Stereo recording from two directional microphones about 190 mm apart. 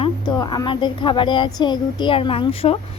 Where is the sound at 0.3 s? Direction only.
20° left (ahead or behind).